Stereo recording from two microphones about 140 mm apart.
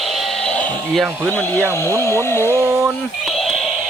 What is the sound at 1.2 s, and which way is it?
Speech, 20° right (ahead or behind).